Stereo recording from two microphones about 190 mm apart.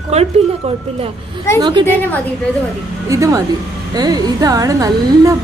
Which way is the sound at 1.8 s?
10° left (ahead or behind).